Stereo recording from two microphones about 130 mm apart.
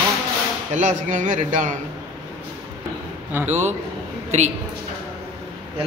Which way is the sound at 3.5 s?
60° right (ahead or behind).